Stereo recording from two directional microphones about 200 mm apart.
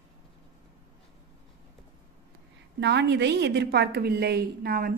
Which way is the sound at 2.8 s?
60° right (ahead or behind).